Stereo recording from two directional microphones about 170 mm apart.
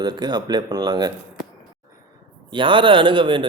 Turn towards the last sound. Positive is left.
turn(degrees=-30)  # may be behind; listen again after turning